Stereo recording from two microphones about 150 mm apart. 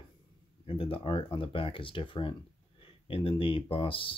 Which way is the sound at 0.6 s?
40° left (ahead or behind).